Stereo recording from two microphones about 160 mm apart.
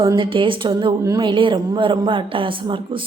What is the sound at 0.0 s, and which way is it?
A woman's voice, 30° right (ahead or behind).